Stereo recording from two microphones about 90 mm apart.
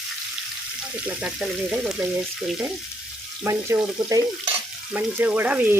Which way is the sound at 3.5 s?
35° right (ahead or behind).